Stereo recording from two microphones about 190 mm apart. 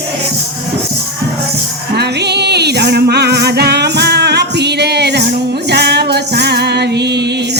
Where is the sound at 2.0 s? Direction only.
60° right (ahead or behind).